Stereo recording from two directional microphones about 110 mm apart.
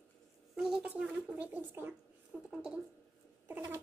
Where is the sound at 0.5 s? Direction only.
5° right (ahead or behind).